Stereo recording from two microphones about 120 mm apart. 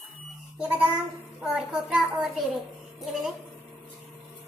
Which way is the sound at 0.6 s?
10° right (ahead or behind).